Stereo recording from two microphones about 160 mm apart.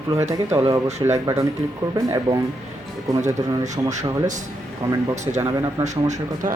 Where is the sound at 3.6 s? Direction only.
50° right (ahead or behind).